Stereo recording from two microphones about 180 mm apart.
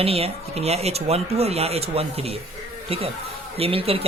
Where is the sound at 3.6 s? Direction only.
30° right (ahead or behind).